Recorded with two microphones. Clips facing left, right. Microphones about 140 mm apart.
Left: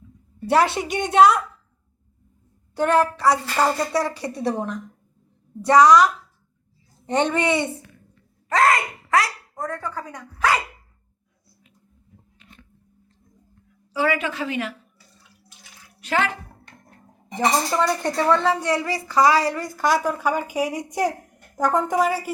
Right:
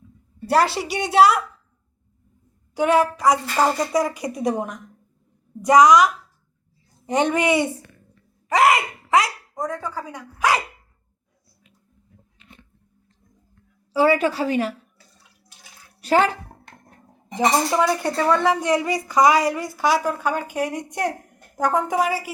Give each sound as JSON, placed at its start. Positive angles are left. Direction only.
{"t": 0.3, "sound": "a woman's voice", "side_deg": 0}
{"t": 2.7, "sound": "speech", "side_deg": -10}
{"t": 13.9, "sound": "a woman's voice", "side_deg": -35}
{"t": 16.0, "sound": "a child's voice", "side_deg": -35}
{"t": 17.3, "sound": "a woman's voice", "side_deg": -10}